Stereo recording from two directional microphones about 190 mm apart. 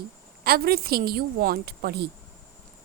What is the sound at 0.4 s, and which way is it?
A woman's voice, 55° right (ahead or behind).